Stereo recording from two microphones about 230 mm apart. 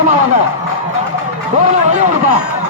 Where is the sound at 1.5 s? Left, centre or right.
Right.